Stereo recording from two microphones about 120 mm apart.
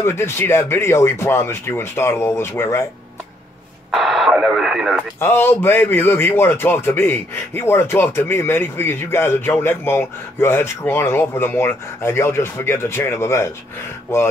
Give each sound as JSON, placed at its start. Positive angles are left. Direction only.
{"t": 0.0, "sound": "a man's voice", "side_deg": 20}
{"t": 3.9, "sound": "speech", "side_deg": 0}
{"t": 5.2, "sound": "a man's voice", "side_deg": 20}